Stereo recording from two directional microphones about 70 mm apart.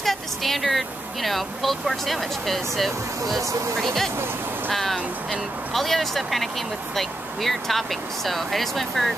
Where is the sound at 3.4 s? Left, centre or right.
Right.